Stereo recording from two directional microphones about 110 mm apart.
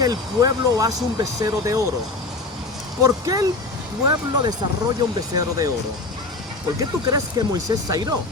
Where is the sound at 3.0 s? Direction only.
35° right (ahead or behind).